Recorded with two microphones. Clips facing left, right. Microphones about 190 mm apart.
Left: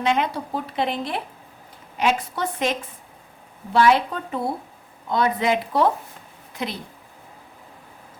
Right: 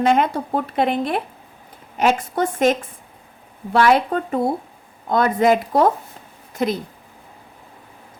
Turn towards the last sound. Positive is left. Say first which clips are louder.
# right 8 dB
turn(degrees=-45)  # may be behind; listen again after turning